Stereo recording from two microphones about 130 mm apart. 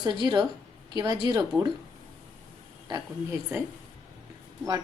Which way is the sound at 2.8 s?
30° right (ahead or behind).